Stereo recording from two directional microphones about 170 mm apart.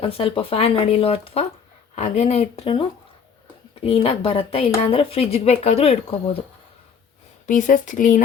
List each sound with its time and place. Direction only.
0.0 s speech: 35° left (ahead or behind)
2.0 s speech: 45° left (ahead or behind)
7.4 s speech: 50° left (ahead or behind)